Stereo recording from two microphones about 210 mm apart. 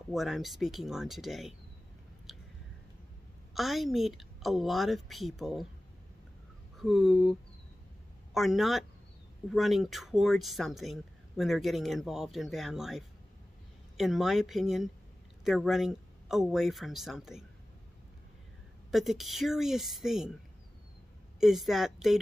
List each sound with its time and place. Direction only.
0.1 s speech: centre (ahead or behind)
3.5 s speech: centre (ahead or behind)
6.8 s speech: centre (ahead or behind)
18.9 s speech: centre (ahead or behind)
21.4 s speech: centre (ahead or behind)